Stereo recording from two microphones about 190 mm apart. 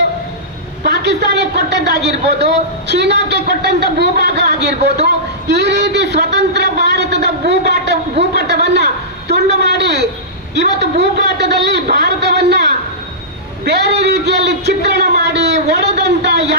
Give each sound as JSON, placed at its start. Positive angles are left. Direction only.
{"t": 0.9, "sound": "a man's voice", "side_deg": -60}